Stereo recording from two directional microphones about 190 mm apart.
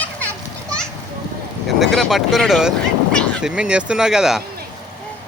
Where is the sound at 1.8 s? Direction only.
Centre (ahead or behind).